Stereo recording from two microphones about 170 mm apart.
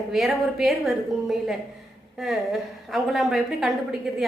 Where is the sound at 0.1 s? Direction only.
Centre (ahead or behind).